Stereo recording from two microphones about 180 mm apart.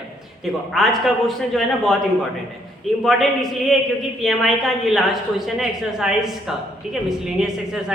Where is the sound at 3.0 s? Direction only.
Centre (ahead or behind).